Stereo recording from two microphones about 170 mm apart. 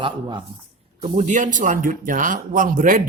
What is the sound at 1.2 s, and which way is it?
A man's voice, 50° right (ahead or behind).